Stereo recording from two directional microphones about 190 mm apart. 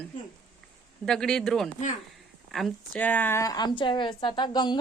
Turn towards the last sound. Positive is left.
turn(degrees=25)  # may be behind; listen again after turning